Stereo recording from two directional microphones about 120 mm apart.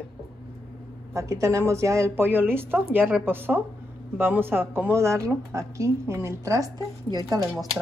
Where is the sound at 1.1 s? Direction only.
25° right (ahead or behind).